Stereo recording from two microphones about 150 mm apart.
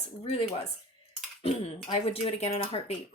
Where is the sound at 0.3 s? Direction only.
40° left (ahead or behind).